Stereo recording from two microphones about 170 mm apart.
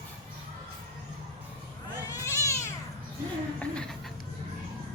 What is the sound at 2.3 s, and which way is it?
Cat, 15° left (ahead or behind).